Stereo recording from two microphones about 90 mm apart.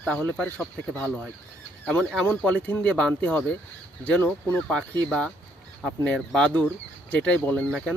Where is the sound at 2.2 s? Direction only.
15° left (ahead or behind).